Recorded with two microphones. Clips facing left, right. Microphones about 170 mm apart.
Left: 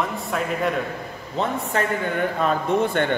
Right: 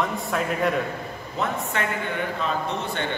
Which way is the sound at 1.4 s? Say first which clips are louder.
Left 3 dB; 35° left (ahead or behind).